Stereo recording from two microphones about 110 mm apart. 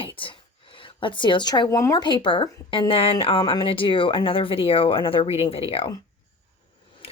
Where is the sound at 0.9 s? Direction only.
50° left (ahead or behind).